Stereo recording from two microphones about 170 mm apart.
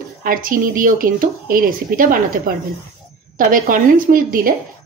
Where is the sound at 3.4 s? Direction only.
55° right (ahead or behind).